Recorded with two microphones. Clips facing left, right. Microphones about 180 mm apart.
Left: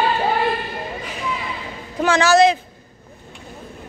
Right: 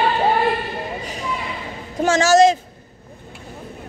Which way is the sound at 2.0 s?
40° right (ahead or behind).